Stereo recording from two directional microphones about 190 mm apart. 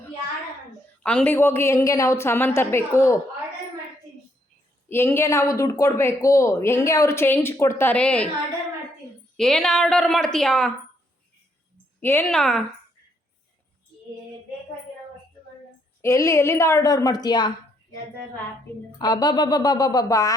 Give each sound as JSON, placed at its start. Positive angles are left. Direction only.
{"t": 1.0, "sound": "speech", "side_deg": 10}
{"t": 4.9, "sound": "speech", "side_deg": 10}
{"t": 9.4, "sound": "a woman's voice", "side_deg": 0}
{"t": 11.9, "sound": "a woman's voice", "side_deg": 10}
{"t": 16.0, "sound": "speech", "side_deg": 15}
{"t": 18.9, "sound": "speech", "side_deg": 20}